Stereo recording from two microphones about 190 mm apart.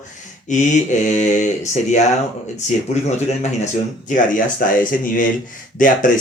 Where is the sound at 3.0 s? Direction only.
35° left (ahead or behind).